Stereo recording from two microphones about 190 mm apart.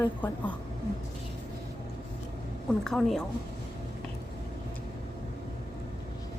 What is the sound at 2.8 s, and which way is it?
Speech, centre (ahead or behind).